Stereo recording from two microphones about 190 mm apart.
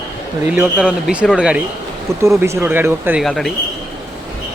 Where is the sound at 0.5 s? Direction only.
5° right (ahead or behind).